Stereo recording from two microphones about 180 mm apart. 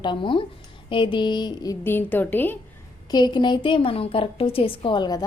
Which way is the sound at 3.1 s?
25° left (ahead or behind).